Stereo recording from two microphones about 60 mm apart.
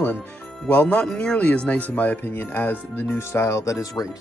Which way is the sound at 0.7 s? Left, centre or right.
Left.